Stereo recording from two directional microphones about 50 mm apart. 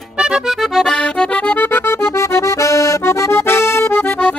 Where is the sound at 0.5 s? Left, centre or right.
Centre.